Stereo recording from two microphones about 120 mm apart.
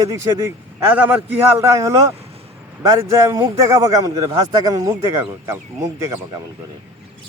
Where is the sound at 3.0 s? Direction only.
25° right (ahead or behind).